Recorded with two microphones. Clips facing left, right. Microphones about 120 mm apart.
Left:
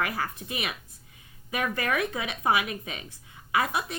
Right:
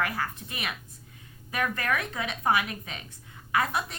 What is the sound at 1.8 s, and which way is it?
A woman's voice, 15° left (ahead or behind).